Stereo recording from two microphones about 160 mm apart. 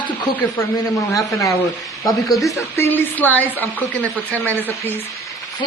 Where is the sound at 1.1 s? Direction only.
20° left (ahead or behind).